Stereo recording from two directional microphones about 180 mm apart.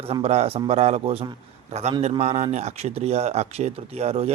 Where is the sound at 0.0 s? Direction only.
35° right (ahead or behind).